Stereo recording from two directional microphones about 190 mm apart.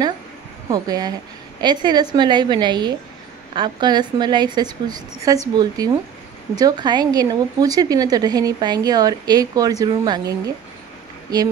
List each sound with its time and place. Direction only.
0.7 s a woman's voice: 20° right (ahead or behind)